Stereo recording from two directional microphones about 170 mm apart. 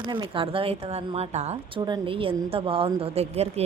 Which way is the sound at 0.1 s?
30° right (ahead or behind).